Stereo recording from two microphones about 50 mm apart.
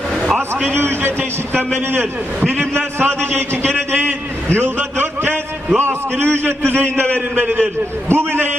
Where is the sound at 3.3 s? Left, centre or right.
Right.